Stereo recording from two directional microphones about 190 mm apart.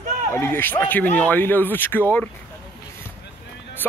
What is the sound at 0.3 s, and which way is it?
Speech, 10° left (ahead or behind).